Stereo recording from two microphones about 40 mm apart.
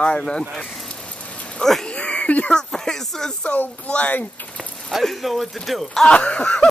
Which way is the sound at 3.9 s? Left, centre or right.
Left.